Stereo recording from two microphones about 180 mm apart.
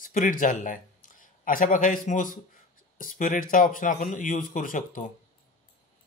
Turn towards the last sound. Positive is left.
turn(degrees=50)  # may be behind; listen again after turning